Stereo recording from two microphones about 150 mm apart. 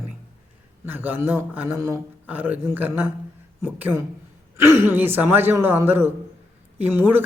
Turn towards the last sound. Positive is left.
turn(degrees=-15)  # may be behind; listen again after turning